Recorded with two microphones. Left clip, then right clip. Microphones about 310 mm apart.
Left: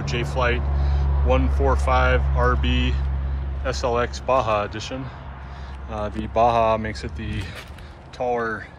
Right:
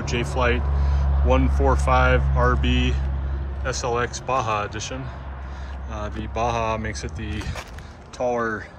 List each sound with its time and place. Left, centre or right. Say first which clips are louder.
0.1 s speech: even; centre
3.6 s speech: left 1 dB; centre